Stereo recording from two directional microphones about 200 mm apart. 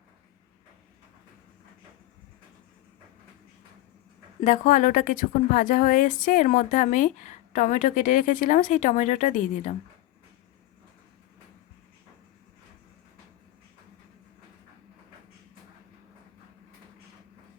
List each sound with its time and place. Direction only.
4.4 s a woman's voice: 40° left (ahead or behind)